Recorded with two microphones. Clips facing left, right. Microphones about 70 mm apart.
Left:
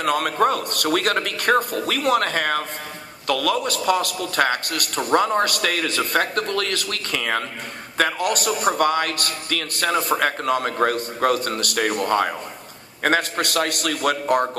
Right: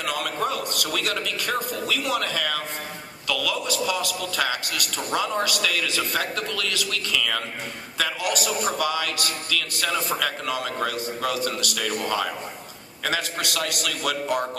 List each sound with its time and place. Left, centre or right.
0.0 s a man's voice: left